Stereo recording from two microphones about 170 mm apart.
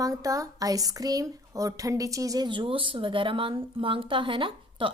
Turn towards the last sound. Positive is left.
turn(degrees=-30)  # may be behind; listen again after turning